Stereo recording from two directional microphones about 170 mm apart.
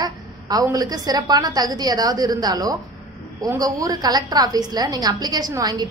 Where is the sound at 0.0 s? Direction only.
20° right (ahead or behind).